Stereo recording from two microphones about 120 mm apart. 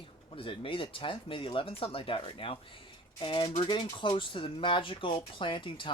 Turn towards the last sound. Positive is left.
turn(degrees=40)  # may be behind; listen again after turning